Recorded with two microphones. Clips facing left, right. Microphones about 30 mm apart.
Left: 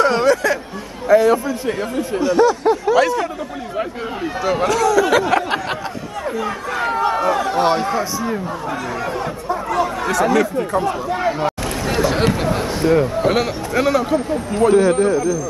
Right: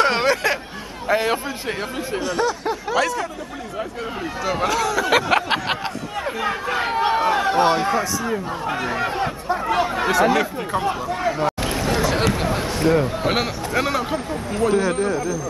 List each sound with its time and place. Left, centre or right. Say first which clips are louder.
0.0 s a man's voice: left 3 dB; right
2.2 s speech: left 9 dB; centre
4.2 s speech: left 5 dB; centre
4.6 s speech: left 4 dB; centre
5.3 s a sound: left 1 dB; right
6.4 s speech: right 1 dB; right
9.2 s speech: even; right
10.0 s speech: left 1 dB; right
11.1 s speech: left 2 dB; centre
12.0 s a sound: left 5 dB; centre
12.4 s speech: left 3 dB; centre
13.3 s speech: left 3 dB; centre
14.3 s speech: left 5 dB; centre